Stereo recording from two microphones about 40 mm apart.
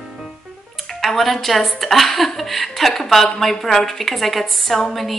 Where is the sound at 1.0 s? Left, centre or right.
Centre.